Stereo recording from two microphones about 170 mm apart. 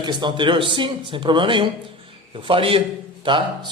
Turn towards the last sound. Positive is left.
turn(degrees=-30)  # may be behind; listen again after turning